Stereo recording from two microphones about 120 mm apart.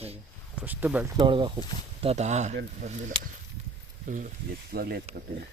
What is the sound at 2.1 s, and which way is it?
Speech, 70° right (ahead or behind).